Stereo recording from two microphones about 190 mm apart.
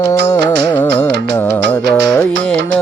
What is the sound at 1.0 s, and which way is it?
Music, 65° right (ahead or behind).